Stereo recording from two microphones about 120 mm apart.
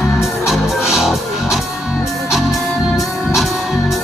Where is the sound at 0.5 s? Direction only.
Centre (ahead or behind).